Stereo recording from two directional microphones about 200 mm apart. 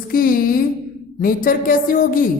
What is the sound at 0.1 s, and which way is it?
A woman's voice, 45° left (ahead or behind).